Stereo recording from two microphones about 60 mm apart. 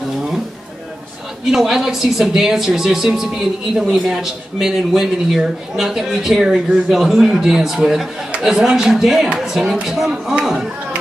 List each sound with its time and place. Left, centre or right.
1.5 s speech: centre